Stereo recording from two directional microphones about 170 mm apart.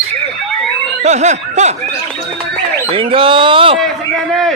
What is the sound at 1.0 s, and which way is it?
Snicker, 40° right (ahead or behind).